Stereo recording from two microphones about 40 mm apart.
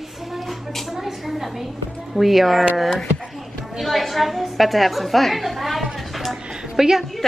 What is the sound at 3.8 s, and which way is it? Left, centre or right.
A woman's voice, centre.